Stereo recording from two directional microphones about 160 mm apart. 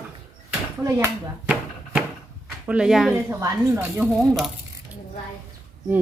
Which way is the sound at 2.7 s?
5° right (ahead or behind).